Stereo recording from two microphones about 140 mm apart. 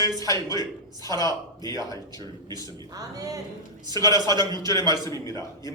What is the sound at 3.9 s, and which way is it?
Speech, 25° left (ahead or behind).